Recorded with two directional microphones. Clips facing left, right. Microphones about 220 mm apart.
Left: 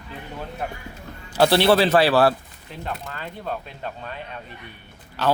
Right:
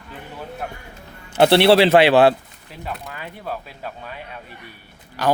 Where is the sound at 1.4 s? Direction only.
25° right (ahead or behind).